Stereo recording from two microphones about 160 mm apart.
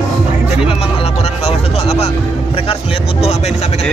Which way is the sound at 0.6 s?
35° left (ahead or behind).